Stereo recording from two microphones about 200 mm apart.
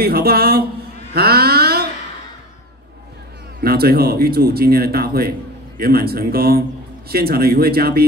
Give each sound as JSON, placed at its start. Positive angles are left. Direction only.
{"t": 0.0, "sound": "speech", "side_deg": -50}
{"t": 1.1, "sound": "a sound", "side_deg": -50}
{"t": 3.6, "sound": "speech", "side_deg": -50}